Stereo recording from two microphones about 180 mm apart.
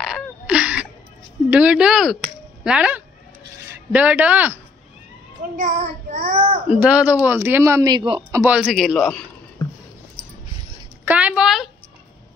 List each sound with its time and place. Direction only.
0.0 s sneeze: 5° right (ahead or behind)
1.5 s a man's voice: 5° right (ahead or behind)
5.6 s child singing: 45° right (ahead or behind)
6.7 s speech: 5° right (ahead or behind); by 8.4 s 25° right (ahead or behind)
8.5 s a man's voice: 5° right (ahead or behind)
11.1 s a sound: 5° right (ahead or behind)